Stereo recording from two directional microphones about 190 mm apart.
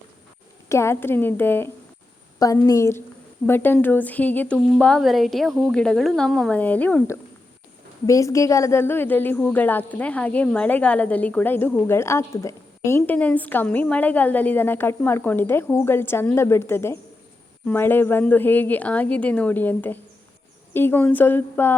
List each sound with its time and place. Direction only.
0.7 s a woman's voice: 15° left (ahead or behind)